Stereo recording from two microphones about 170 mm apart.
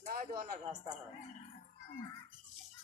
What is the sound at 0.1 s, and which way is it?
Speech, 55° right (ahead or behind).